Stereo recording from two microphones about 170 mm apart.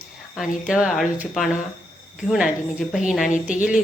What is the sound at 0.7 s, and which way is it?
A woman's voice, 5° right (ahead or behind).